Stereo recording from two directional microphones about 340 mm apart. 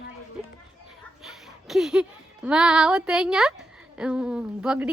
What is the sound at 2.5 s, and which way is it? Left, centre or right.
A woman's voice, centre.